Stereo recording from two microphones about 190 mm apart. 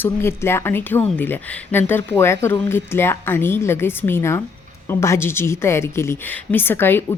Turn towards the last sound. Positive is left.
turn(degrees=10)  # may be behind; listen again after turning